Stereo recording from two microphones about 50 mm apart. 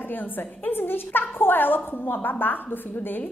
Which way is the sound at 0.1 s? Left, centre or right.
Left.